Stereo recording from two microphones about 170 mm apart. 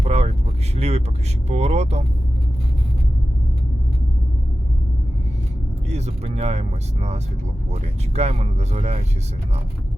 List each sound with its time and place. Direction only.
0.0 s vehicle: 40° right (ahead or behind)
0.8 s speech: 40° right (ahead or behind)
5.9 s speech: 40° right (ahead or behind)